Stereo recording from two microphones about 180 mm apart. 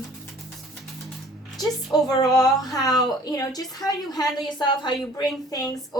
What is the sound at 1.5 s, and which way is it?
A woman's voice, 20° left (ahead or behind).